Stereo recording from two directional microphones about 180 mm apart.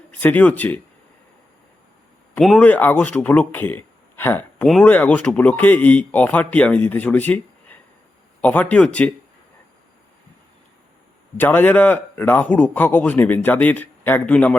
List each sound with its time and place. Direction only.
0.1 s speech: 10° left (ahead or behind)
2.3 s speech: 5° left (ahead or behind)
11.3 s speech: 10° left (ahead or behind)